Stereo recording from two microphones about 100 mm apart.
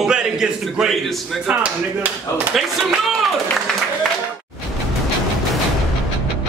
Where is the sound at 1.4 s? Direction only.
15° right (ahead or behind).